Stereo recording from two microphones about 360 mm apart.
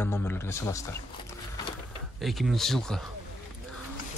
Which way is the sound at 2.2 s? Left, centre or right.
Centre.